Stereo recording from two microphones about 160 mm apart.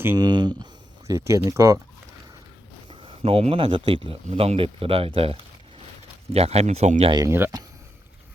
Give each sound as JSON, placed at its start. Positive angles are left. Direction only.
{"t": 0.2, "sound": "speech", "side_deg": -25}
{"t": 2.9, "sound": "speech", "side_deg": -30}
{"t": 7.1, "sound": "speech", "side_deg": -25}
{"t": 7.3, "sound": "speech", "side_deg": -15}